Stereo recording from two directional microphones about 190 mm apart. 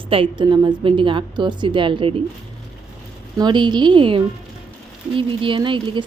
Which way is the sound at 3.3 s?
20° right (ahead or behind).